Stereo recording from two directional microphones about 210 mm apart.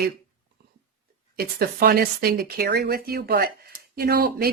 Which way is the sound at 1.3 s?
45° right (ahead or behind).